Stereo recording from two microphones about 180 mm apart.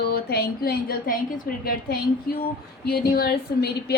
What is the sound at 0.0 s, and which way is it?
A woman's voice, 60° left (ahead or behind).